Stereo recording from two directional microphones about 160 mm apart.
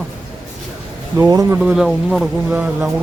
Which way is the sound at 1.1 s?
20° right (ahead or behind).